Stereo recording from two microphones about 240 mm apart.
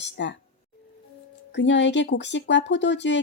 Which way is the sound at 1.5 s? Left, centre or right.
Left.